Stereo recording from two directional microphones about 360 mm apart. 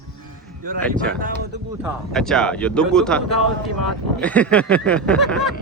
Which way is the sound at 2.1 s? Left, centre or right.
Centre.